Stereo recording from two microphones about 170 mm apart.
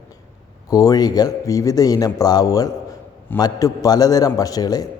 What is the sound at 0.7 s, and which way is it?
A man's voice, 20° left (ahead or behind).